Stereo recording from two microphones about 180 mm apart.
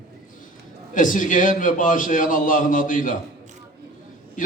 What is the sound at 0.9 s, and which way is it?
A man's voice, 45° left (ahead or behind).